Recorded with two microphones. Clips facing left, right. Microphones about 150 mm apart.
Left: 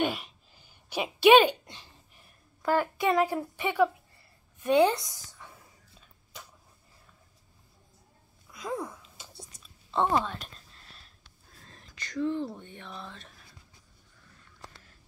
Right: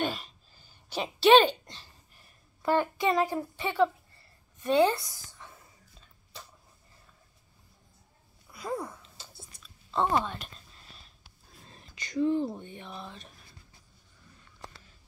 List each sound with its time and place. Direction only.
0.0 s a sound: 15° left (ahead or behind)
2.6 s speech: 5° left (ahead or behind); by 5.2 s 20° left (ahead or behind)
5.3 s whispering: centre (ahead or behind)
8.5 s a sound: 5° right (ahead or behind)
9.9 s speech: centre (ahead or behind)
11.7 s speech: 10° right (ahead or behind)